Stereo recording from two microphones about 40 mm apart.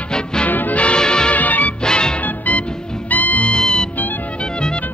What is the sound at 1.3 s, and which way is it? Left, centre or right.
Music, left.